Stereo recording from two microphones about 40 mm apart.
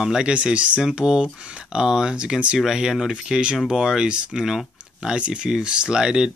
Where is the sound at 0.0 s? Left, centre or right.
Centre.